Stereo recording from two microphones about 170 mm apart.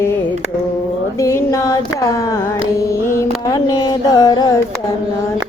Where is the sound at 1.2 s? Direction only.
15° left (ahead or behind).